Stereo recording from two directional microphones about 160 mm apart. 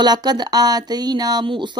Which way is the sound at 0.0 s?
25° right (ahead or behind).